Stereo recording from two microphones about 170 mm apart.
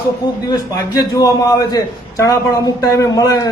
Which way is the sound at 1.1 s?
20° left (ahead or behind).